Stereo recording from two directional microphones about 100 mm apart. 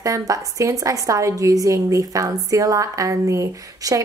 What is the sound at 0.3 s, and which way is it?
A woman's voice, 35° right (ahead or behind).